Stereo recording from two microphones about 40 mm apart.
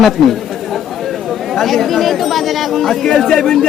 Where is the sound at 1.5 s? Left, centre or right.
Centre.